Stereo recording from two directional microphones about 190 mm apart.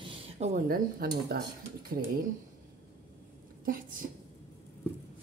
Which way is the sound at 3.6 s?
45° right (ahead or behind).